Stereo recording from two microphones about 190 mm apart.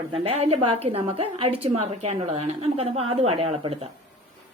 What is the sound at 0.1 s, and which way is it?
A woman's voice, 30° right (ahead or behind).